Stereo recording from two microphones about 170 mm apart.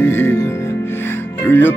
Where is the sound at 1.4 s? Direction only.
10° left (ahead or behind).